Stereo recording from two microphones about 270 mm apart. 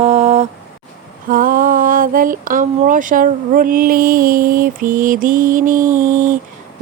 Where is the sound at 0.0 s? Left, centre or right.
Right.